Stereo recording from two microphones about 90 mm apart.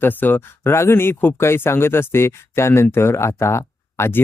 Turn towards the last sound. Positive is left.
turn(degrees=30)  # may be behind; listen again after turning